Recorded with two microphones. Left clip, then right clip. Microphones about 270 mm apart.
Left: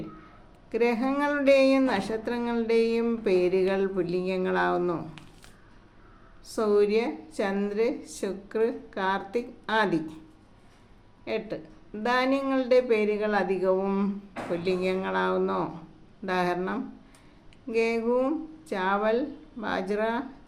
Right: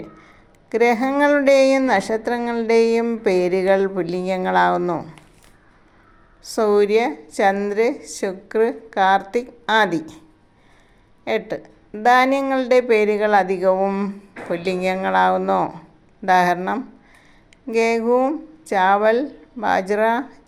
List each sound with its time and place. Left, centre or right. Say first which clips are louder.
0.7 s speech: right 8 dB; right
6.4 s speech: right 7 dB; right
12.0 s speech: right 10 dB; right